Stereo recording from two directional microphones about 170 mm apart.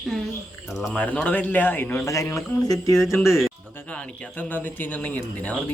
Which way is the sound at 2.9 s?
Centre (ahead or behind).